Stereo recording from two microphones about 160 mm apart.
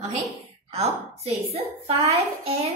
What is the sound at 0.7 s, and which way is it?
A child's voice, 40° right (ahead or behind).